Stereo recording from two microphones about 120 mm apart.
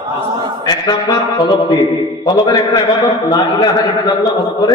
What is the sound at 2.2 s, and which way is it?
A man's voice, 35° left (ahead or behind).